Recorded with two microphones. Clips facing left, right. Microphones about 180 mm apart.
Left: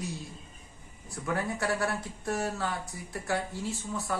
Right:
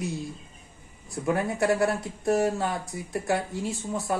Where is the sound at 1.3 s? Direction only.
20° right (ahead or behind).